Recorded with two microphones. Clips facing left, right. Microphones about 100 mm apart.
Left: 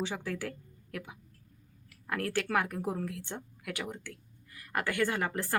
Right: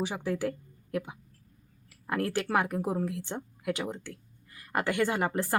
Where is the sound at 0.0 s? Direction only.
20° right (ahead or behind).